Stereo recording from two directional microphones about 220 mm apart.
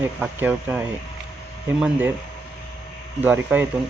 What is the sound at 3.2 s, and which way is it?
Speech, 10° right (ahead or behind).